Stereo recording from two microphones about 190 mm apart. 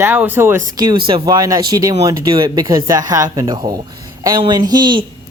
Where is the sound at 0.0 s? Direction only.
10° right (ahead or behind).